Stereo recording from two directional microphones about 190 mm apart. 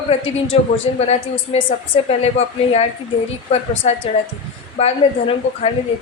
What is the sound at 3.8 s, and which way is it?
A woman's voice, 30° left (ahead or behind).